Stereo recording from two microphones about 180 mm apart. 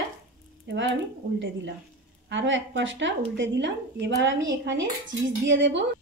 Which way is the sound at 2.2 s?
90° right.